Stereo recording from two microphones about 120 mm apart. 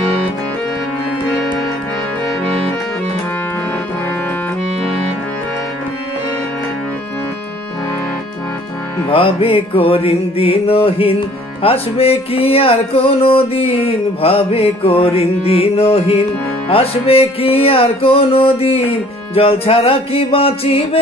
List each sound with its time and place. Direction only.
9.1 s music: 50° left (ahead or behind)